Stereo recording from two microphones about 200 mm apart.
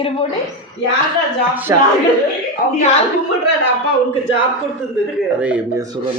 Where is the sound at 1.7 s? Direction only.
15° right (ahead or behind).